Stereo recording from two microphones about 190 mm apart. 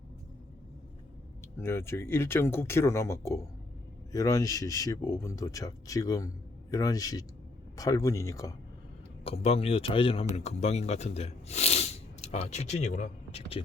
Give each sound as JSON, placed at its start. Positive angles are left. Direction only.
{"t": 1.5, "sound": "speech", "side_deg": 15}
{"t": 9.2, "sound": "speech", "side_deg": 30}